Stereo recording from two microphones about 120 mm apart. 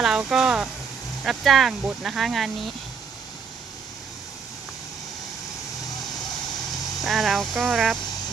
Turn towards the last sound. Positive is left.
turn(degrees=0)  # may be behind; listen again after turning